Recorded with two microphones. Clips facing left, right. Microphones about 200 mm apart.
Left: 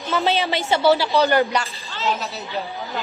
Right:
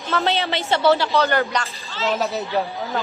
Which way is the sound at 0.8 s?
Centre (ahead or behind).